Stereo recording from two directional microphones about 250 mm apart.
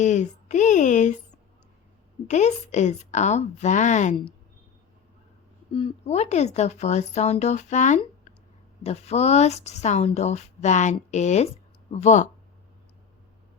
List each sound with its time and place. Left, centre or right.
0.0 s a woman's voice: left
2.2 s a woman's voice: left
5.7 s a woman's voice: left